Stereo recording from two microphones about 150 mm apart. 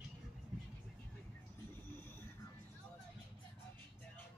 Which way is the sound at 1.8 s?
15° left (ahead or behind).